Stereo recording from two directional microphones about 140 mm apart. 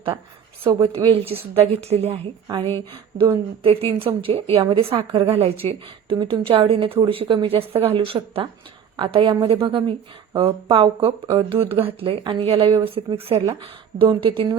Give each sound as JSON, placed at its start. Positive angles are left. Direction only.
{"t": 0.6, "sound": "speech", "side_deg": -30}
{"t": 1.1, "sound": "a woman's voice", "side_deg": -45}
{"t": 6.1, "sound": "a woman's voice", "side_deg": -35}
{"t": 11.5, "sound": "a woman's voice", "side_deg": -40}